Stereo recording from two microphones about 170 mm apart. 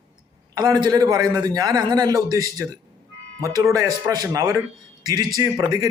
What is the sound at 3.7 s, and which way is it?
A man's voice, 20° right (ahead or behind).